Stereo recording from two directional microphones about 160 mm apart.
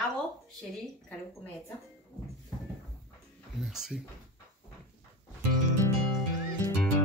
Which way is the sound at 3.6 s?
5° right (ahead or behind).